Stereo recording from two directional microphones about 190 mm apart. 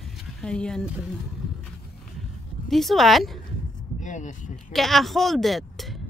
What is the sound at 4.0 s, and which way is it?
Speech, 40° left (ahead or behind).